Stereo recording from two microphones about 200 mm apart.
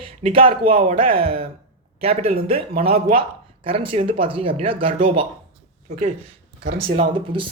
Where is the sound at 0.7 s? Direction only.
30° right (ahead or behind).